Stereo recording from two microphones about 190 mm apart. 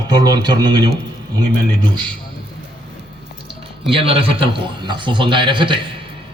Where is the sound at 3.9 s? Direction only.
30° right (ahead or behind).